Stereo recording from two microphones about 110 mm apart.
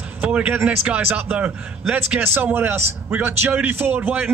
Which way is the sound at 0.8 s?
10° right (ahead or behind).